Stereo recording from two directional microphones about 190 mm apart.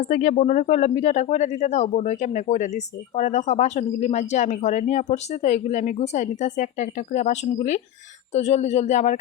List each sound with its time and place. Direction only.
0.0 s speech: 40° left (ahead or behind)